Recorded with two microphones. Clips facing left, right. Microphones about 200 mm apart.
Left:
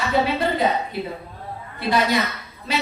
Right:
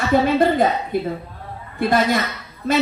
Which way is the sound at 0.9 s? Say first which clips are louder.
Right 6 dB; 50° right (ahead or behind).